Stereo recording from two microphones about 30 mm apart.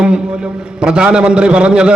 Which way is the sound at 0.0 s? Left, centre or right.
Right.